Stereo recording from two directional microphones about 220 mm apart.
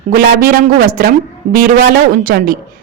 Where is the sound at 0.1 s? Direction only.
40° right (ahead or behind).